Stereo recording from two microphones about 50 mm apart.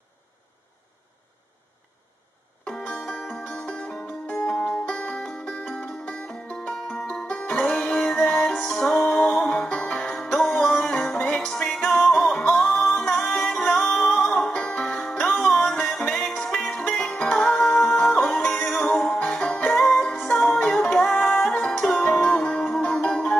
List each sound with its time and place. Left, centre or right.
2.6 s music: centre